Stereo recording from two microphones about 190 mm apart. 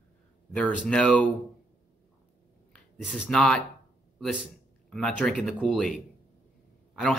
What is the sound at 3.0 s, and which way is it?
A man's voice, centre (ahead or behind).